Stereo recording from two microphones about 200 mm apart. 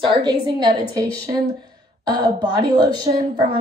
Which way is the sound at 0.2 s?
20° right (ahead or behind).